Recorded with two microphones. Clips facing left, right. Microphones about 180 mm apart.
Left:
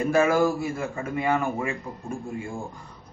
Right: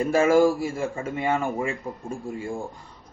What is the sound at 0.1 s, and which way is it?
A man's voice, 25° right (ahead or behind).